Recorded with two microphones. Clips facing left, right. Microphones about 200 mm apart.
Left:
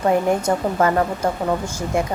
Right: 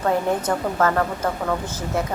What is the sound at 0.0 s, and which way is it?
A woman's voice, 15° left (ahead or behind).